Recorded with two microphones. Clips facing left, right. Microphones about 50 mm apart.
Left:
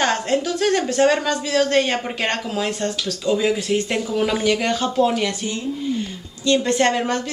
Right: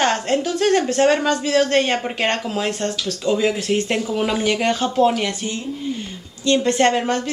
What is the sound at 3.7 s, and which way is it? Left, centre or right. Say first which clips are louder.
A woman's voice: right 1 dB; centre.